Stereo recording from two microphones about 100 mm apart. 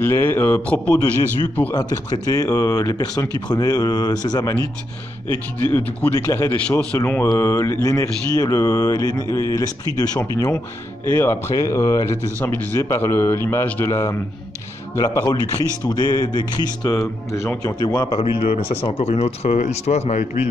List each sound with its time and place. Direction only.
0.0 s speech: 25° left (ahead or behind)
1.8 s speech: 40° left (ahead or behind)
5.6 s speech: 20° left (ahead or behind)
6.1 s speech: 30° left (ahead or behind)
11.1 s speech: 25° left (ahead or behind)
15.9 s music: 40° left (ahead or behind)
16.9 s speech: 30° left (ahead or behind)
18.1 s speech: 65° left (ahead or behind); by 20.4 s 90° left